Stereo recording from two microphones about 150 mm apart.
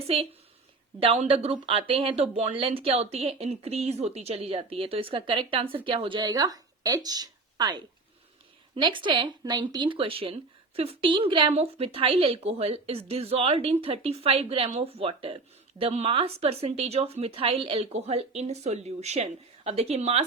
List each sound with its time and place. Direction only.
0.0 s a woman's voice: 40° right (ahead or behind)